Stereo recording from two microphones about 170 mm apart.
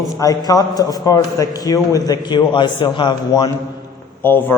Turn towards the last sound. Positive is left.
turn(degrees=10)  # may be behind; listen again after turning